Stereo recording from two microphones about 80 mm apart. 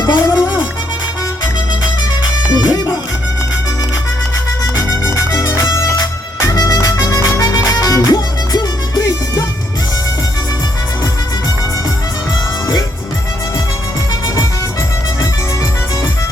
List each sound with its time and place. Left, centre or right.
0.0 s music: left
2.5 s music: left
4.6 s music: left